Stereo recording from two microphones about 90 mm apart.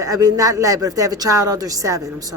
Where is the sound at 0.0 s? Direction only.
40° right (ahead or behind).